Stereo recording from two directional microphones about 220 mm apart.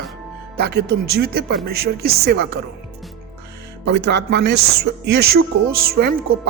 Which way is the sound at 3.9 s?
50° right (ahead or behind).